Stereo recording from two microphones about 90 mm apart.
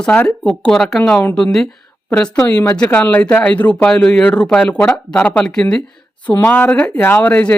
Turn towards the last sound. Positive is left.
turn(degrees=15)  # may be behind; listen again after turning